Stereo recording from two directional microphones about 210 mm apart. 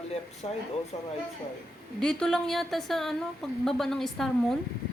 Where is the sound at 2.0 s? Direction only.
5° left (ahead or behind).